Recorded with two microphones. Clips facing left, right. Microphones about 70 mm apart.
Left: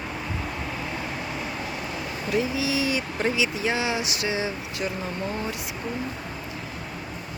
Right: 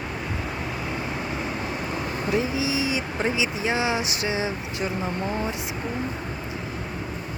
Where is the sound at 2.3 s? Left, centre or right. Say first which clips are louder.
Even; right.